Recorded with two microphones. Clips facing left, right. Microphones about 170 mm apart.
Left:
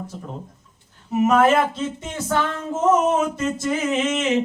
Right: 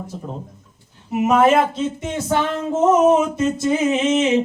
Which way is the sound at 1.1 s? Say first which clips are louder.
Right 2 dB; 15° right (ahead or behind).